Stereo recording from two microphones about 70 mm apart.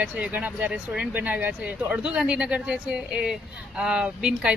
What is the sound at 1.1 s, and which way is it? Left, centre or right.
Speech, right.